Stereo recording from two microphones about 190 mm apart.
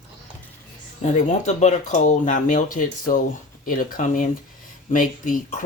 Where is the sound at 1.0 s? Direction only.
35° left (ahead or behind).